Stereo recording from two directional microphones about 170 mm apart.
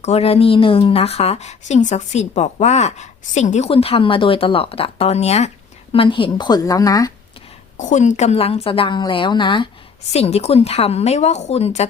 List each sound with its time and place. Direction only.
0.0 s a woman's voice: 40° left (ahead or behind); by 7.1 s 20° left (ahead or behind)
7.8 s a woman's voice: 45° left (ahead or behind); by 9.6 s 30° left (ahead or behind)
10.1 s a woman's voice: 40° left (ahead or behind)